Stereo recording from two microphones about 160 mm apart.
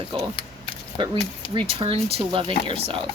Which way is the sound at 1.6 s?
35° right (ahead or behind).